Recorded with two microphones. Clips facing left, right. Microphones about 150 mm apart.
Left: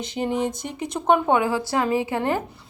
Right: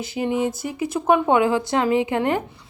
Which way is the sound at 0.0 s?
5° right (ahead or behind).